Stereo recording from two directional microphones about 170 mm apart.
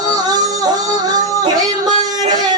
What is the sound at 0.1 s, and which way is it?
Music, 20° right (ahead or behind).